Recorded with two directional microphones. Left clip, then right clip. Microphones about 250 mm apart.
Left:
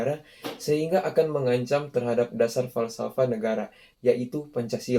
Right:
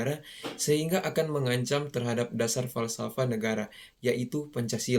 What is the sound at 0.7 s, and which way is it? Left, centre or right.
Speech, right.